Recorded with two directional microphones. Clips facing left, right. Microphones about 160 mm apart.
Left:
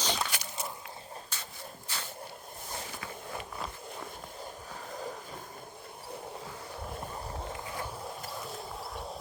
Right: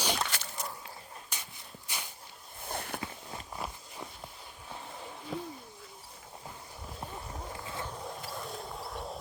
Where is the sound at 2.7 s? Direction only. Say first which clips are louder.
Right 4 dB; 60° right (ahead or behind).